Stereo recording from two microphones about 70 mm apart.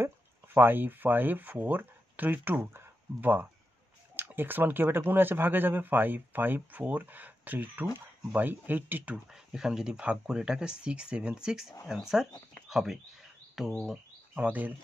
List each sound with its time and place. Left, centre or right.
0.6 s speech: right
9.3 s speech: centre
14.3 s speech: right